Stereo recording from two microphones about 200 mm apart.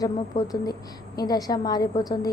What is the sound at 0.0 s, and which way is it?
A woman's voice, 20° left (ahead or behind).